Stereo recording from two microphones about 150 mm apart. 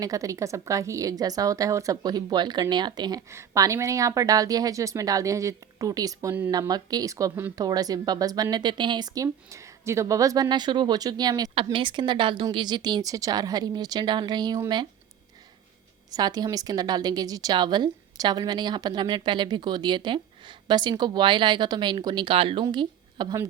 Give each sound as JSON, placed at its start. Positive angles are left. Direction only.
{"t": 0.0, "sound": "speech", "side_deg": -20}
{"t": 16.1, "sound": "a woman's voice", "side_deg": -25}